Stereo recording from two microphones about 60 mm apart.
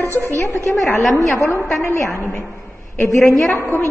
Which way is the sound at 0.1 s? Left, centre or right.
Right.